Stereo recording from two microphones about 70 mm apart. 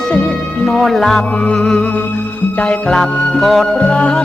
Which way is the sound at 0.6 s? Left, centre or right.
Centre.